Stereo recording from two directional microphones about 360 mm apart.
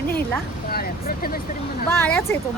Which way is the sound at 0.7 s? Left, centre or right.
Left.